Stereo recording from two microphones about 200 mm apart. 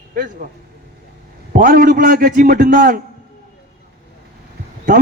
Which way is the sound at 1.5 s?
45° right (ahead or behind).